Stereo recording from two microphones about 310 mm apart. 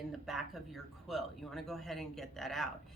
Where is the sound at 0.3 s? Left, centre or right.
Centre.